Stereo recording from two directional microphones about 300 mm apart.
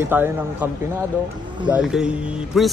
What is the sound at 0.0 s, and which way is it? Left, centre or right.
Speech, centre.